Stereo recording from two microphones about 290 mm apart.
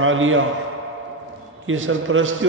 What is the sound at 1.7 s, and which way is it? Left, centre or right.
Speech, right.